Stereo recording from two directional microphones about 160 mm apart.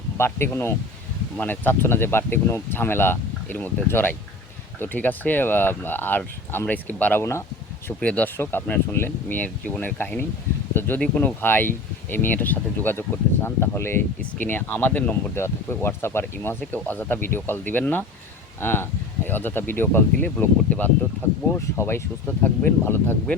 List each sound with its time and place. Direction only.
0.2 s speech: 15° left (ahead or behind)